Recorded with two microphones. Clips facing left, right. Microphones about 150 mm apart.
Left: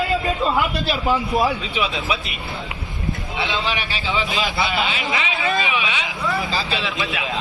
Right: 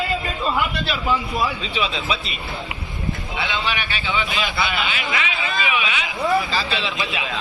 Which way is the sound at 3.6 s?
30° left (ahead or behind).